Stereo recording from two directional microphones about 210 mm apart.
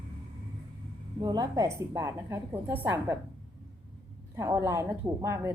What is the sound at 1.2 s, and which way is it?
A woman's voice, 20° right (ahead or behind).